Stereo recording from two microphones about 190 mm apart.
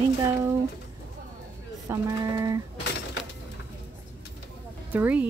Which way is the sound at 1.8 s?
15° right (ahead or behind).